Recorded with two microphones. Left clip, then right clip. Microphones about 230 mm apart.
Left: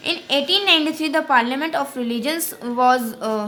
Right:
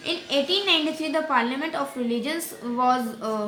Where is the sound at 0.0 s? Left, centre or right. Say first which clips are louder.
Left 4 dB; left.